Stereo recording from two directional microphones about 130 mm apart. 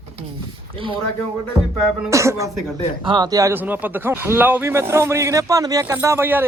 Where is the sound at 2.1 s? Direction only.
25° right (ahead or behind).